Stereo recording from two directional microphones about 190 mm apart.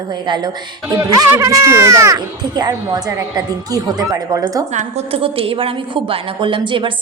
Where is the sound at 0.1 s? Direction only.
25° right (ahead or behind).